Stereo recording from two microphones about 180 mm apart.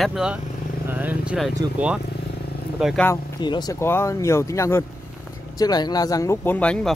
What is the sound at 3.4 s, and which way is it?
Speech, 25° left (ahead or behind).